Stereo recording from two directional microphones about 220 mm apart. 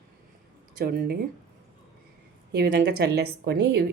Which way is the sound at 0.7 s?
45° right (ahead or behind).